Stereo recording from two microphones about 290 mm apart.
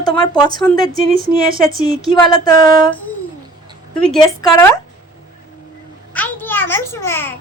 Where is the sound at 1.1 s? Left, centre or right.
Right.